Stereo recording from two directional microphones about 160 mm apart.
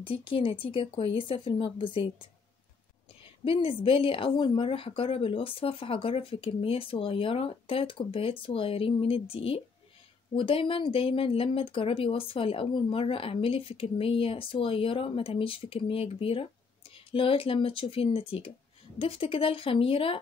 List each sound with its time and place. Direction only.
0.0 s speech: 30° left (ahead or behind)
3.4 s speech: 35° left (ahead or behind)